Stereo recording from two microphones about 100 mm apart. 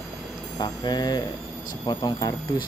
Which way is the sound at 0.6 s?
45° left (ahead or behind).